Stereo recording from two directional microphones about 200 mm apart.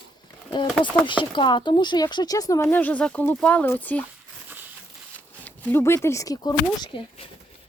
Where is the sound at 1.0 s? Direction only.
25° left (ahead or behind); by 4.0 s 10° left (ahead or behind).